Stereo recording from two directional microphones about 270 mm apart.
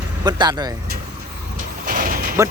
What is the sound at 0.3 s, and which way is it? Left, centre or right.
Speech, centre.